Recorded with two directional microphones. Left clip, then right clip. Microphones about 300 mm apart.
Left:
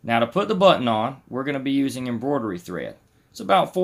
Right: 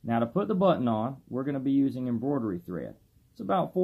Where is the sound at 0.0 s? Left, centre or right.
Centre.